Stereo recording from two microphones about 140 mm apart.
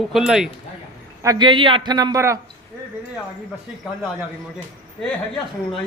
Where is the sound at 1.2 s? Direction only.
30° right (ahead or behind).